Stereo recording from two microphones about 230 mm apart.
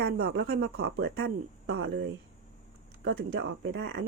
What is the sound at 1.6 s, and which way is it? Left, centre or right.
Speech, right.